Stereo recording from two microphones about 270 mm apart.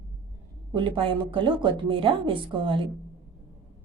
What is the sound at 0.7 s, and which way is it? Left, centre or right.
A woman's voice, centre.